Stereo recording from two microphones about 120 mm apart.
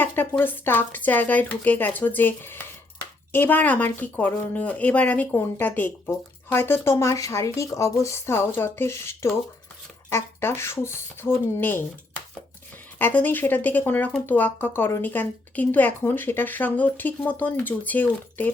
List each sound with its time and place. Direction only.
0.0 s a woman's voice: 15° left (ahead or behind)
13.0 s a woman's voice: 15° left (ahead or behind)